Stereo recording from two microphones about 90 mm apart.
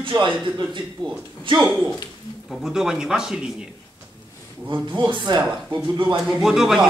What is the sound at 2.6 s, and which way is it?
Speech, 5° right (ahead or behind).